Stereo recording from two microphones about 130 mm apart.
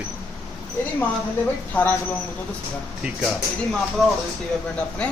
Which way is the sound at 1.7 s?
15° left (ahead or behind).